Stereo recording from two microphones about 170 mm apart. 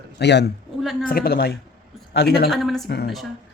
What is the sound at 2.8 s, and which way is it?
Speech, 70° left (ahead or behind).